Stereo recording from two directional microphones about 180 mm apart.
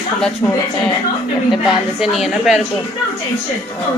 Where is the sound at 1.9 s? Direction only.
Centre (ahead or behind).